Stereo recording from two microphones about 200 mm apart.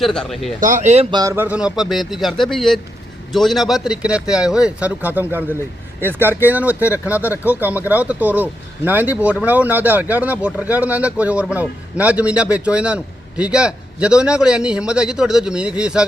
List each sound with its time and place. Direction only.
0.0 s speech: centre (ahead or behind)
0.6 s speech: 40° right (ahead or behind)
1.1 s speech: 15° right (ahead or behind)